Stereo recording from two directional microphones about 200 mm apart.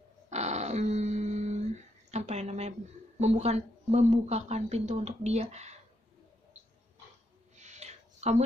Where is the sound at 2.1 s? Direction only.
35° right (ahead or behind).